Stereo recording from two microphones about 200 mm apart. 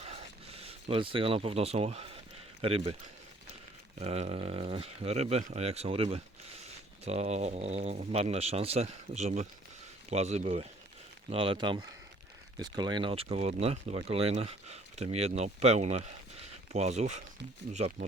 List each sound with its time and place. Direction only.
0.0 s a sound: 30° right (ahead or behind)
2.6 s speech: 30° right (ahead or behind)
4.0 s speech: 30° right (ahead or behind)